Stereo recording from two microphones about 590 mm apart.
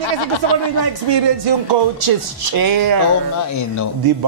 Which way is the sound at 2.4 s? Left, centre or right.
Right.